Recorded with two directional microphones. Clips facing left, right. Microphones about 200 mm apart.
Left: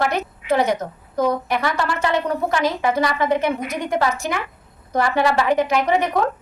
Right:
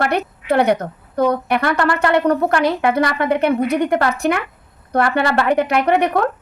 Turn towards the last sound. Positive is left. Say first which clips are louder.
# right 3 dB
turn(degrees=-60)  # may be behind; listen again after turning